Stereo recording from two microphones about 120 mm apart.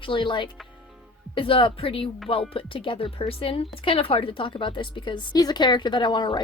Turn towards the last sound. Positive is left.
turn(degrees=40)  # may be behind; listen again after turning